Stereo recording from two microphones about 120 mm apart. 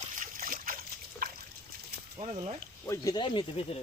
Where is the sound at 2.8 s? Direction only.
25° left (ahead or behind); by 3.8 s 50° left (ahead or behind).